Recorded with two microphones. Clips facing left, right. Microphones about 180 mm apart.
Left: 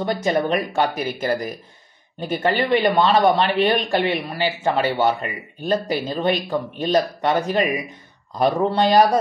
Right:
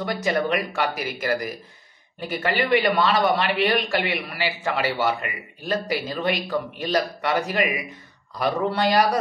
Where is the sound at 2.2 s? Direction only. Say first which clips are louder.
Left 3 dB; 25° left (ahead or behind).